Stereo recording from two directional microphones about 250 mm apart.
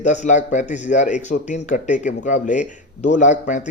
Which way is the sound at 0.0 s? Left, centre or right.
Left.